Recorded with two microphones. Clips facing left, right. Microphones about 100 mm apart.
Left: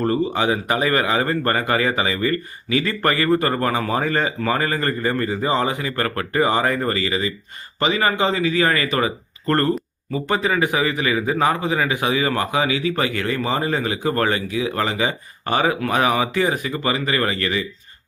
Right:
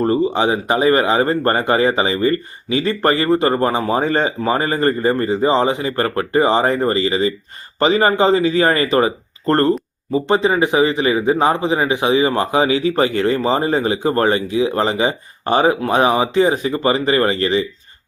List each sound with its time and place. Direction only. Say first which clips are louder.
0.0 s a man's voice: right 4 dB; 25° right (ahead or behind)